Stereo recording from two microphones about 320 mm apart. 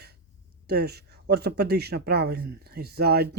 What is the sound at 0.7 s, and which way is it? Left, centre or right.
Speech, right.